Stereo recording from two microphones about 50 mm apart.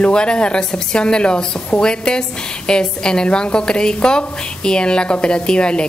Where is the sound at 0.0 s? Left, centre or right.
Centre.